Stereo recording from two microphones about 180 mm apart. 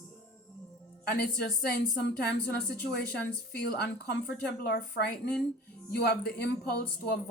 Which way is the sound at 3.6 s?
65° left (ahead or behind).